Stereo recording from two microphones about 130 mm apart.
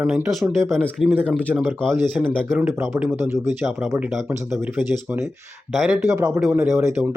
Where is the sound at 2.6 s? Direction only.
20° right (ahead or behind).